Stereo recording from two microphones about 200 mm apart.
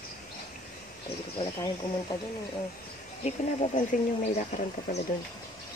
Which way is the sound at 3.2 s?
30° left (ahead or behind).